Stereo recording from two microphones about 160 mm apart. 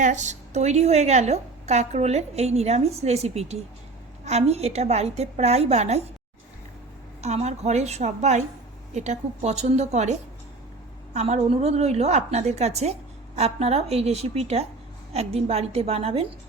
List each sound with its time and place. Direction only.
0.0 s a woman's voice: 50° right (ahead or behind)
7.2 s a woman's voice: 45° right (ahead or behind)